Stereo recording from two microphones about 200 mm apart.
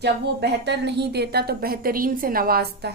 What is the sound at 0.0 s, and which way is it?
A woman's voice, 55° right (ahead or behind).